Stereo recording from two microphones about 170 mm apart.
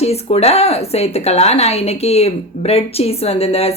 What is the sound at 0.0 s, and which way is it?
Speech, 40° left (ahead or behind).